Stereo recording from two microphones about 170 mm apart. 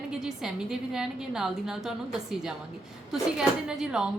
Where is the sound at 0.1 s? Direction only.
Centre (ahead or behind).